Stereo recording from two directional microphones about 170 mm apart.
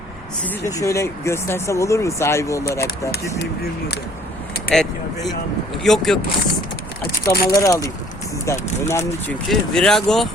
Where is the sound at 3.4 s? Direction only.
70° left (ahead or behind).